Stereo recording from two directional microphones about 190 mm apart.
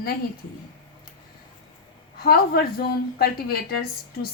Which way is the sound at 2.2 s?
55° left (ahead or behind).